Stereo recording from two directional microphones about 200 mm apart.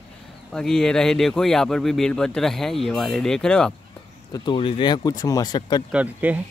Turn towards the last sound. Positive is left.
turn(degrees=-5)  # may be behind; listen again after turning